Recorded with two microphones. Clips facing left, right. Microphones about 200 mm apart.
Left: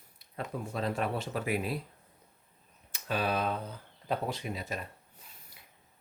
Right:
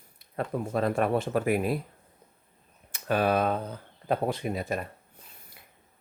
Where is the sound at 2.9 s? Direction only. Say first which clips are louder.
Right 7 dB; 55° right (ahead or behind).